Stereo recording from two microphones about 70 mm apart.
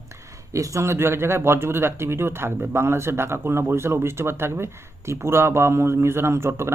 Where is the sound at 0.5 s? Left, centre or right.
Right.